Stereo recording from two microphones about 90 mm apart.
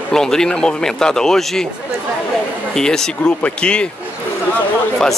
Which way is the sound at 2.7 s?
5° left (ahead or behind).